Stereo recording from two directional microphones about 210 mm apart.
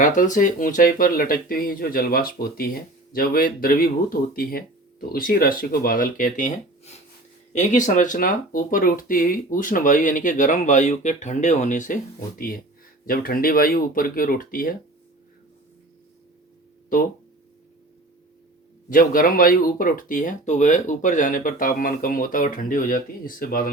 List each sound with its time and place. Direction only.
0.0 s speech: 40° left (ahead or behind)
18.9 s speech: 40° left (ahead or behind)